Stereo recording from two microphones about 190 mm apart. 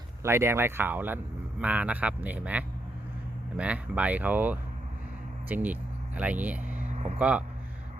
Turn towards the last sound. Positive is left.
turn(degrees=-5)  # may be behind; listen again after turning